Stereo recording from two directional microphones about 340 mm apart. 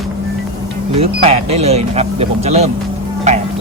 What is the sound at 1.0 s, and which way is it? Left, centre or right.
Speech, centre.